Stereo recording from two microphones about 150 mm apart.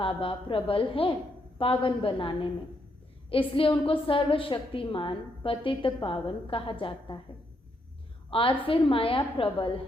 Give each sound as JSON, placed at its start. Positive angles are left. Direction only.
{"t": 0.0, "sound": "a woman's voice", "side_deg": 35}
{"t": 8.3, "sound": "a woman's voice", "side_deg": 35}